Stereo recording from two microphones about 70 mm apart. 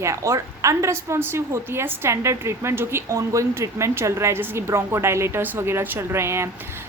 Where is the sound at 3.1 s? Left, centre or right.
Right.